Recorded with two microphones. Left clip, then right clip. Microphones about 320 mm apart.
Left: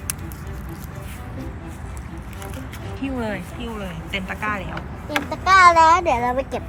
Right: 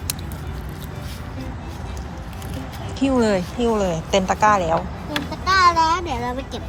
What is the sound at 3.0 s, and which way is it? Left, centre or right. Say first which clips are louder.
Speech: right 9 dB; centre.